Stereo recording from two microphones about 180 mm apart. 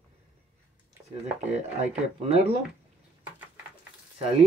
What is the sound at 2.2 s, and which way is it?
Speech, 35° right (ahead or behind).